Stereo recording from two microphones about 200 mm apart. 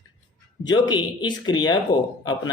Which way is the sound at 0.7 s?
20° left (ahead or behind).